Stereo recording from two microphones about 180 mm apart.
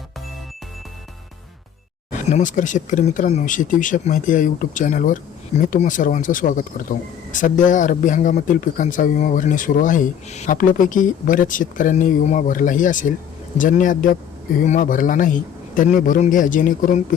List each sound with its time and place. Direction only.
2.0 s speech: 45° left (ahead or behind)